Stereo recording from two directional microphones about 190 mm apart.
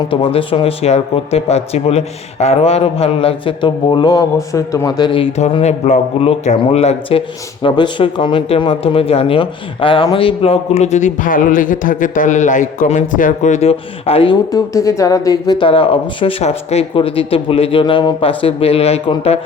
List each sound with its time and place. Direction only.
0.1 s speech: 30° left (ahead or behind)
14.5 s speech: 15° left (ahead or behind)